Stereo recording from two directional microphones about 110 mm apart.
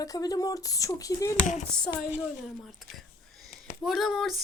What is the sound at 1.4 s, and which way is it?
Speech, 90° left.